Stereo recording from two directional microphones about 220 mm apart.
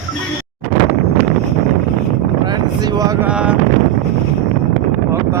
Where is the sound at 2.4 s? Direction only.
20° right (ahead or behind).